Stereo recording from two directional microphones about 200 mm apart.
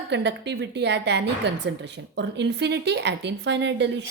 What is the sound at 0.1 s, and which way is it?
A woman's voice, 60° right (ahead or behind).